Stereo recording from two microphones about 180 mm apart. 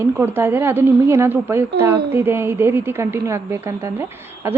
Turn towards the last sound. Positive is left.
turn(degrees=-15)  # may be behind; listen again after turning